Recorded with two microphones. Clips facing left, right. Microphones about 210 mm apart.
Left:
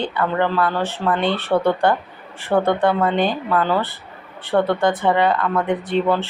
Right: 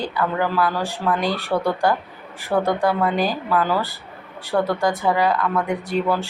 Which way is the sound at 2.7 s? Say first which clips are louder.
Left 2 dB; 5° right (ahead or behind).